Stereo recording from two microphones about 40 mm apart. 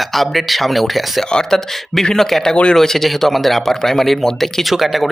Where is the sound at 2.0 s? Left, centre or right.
Centre.